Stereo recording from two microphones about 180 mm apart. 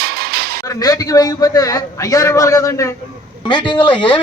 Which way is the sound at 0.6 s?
20° left (ahead or behind).